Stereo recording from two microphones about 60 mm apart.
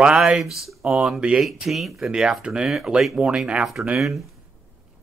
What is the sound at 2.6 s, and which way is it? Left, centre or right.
Speech, centre.